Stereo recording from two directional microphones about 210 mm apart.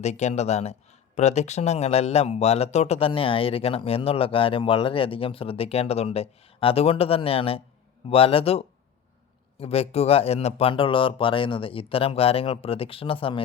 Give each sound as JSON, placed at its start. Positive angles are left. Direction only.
{"t": 0.0, "sound": "speech", "side_deg": 30}